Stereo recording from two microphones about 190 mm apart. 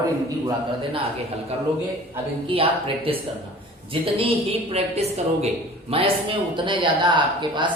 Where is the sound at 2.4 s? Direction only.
30° right (ahead or behind).